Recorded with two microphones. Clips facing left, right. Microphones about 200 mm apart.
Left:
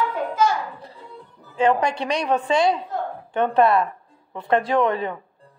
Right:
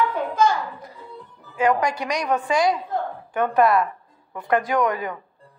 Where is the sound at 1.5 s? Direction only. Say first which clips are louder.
Left 1 dB; 25° left (ahead or behind).